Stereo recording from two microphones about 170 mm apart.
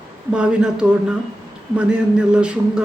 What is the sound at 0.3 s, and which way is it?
Speech, 5° right (ahead or behind).